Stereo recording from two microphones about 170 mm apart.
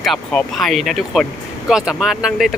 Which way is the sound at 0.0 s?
5° left (ahead or behind).